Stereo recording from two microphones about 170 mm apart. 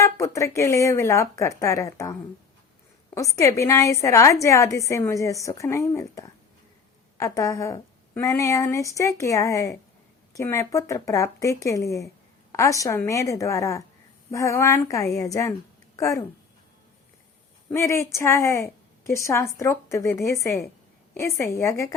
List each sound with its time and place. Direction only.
0.0 s speech: 15° left (ahead or behind)
3.2 s a woman's voice: 20° left (ahead or behind)
17.7 s speech: 15° left (ahead or behind)